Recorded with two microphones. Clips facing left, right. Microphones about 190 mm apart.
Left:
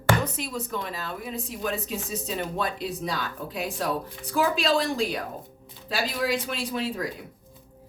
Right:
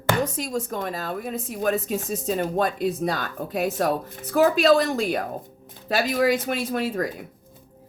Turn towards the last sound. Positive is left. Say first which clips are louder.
# right 4 dB
turn(degrees=-50)  # may be behind; listen again after turning